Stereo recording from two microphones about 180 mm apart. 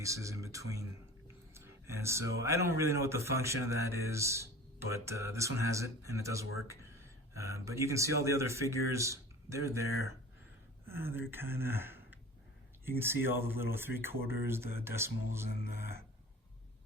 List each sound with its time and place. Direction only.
0.0 s speech: 15° right (ahead or behind)